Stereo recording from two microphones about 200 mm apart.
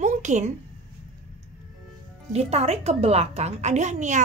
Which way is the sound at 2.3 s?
30° right (ahead or behind).